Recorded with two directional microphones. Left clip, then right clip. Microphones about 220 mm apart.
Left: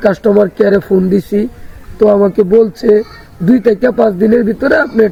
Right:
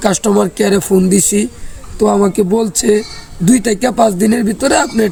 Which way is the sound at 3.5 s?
55° right (ahead or behind).